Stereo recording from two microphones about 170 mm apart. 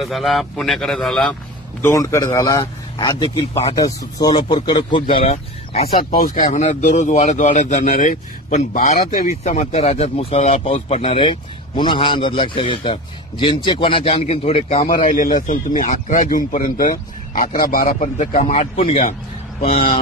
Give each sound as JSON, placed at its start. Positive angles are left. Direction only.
{"t": 0.0, "sound": "a man's voice", "side_deg": 0}
{"t": 1.8, "sound": "a man's voice", "side_deg": 15}
{"t": 6.1, "sound": "speech", "side_deg": 55}
{"t": 14.7, "sound": "speech", "side_deg": 50}